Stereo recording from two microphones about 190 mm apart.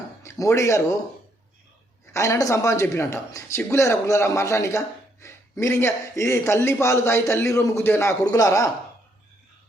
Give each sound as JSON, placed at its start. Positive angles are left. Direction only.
{"t": 0.3, "sound": "speech", "side_deg": 15}
{"t": 2.1, "sound": "speech", "side_deg": 15}